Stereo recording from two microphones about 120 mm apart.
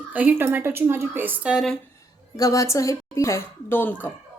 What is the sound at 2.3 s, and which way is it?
A woman's voice, 30° left (ahead or behind).